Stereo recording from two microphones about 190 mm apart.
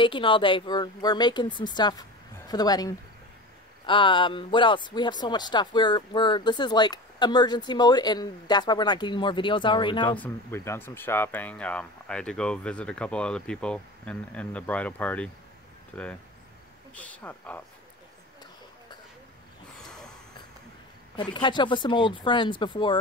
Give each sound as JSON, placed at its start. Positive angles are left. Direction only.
{"t": 0.0, "sound": "speech", "side_deg": 25}
{"t": 10.0, "sound": "speech", "side_deg": 10}
{"t": 19.8, "sound": "snort", "side_deg": 5}
{"t": 21.2, "sound": "speech", "side_deg": 25}